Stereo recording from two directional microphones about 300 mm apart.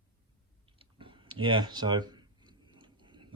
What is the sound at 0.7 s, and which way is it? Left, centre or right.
Speech, centre.